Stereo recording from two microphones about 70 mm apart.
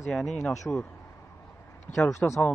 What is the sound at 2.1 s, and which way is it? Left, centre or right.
Speech, left.